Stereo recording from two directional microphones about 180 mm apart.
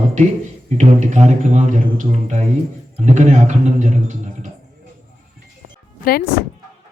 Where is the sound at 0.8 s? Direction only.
40° right (ahead or behind).